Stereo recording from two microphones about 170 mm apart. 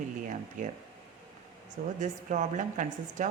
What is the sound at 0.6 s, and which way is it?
Speech, 45° right (ahead or behind).